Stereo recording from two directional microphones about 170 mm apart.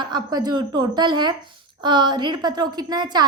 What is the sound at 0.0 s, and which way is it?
A woman's voice, 25° right (ahead or behind).